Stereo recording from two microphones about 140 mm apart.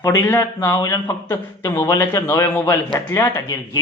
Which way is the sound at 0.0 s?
20° left (ahead or behind).